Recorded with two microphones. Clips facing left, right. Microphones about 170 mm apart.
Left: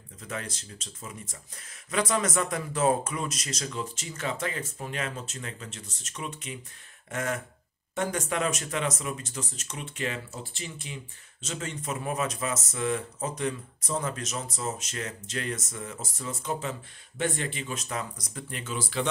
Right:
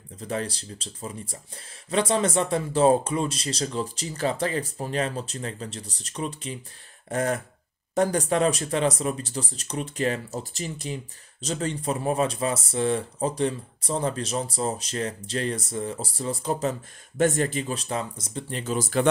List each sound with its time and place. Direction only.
0.2 s speech: 35° right (ahead or behind)